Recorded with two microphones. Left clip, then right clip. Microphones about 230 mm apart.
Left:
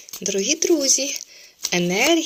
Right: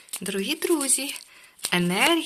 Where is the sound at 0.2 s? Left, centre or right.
Centre.